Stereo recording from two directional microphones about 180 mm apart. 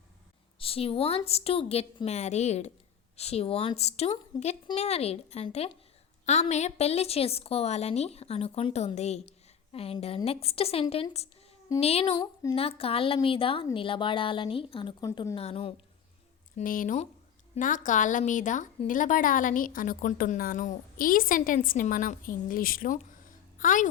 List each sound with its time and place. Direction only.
0.6 s a woman's voice: 30° left (ahead or behind)
12.2 s a woman's voice: 20° left (ahead or behind)
15.4 s a woman's voice: 30° left (ahead or behind)
16.6 s a woman's voice: 50° left (ahead or behind)
23.0 s a sound: 45° left (ahead or behind)